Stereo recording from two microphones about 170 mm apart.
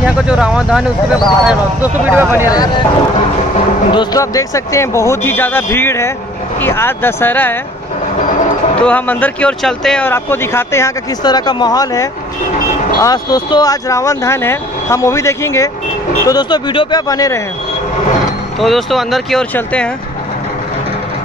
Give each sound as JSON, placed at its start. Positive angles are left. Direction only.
{"t": 0.0, "sound": "speech", "side_deg": -5}
{"t": 3.9, "sound": "speech", "side_deg": 25}
{"t": 8.8, "sound": "speech", "side_deg": 10}
{"t": 18.6, "sound": "speech", "side_deg": 0}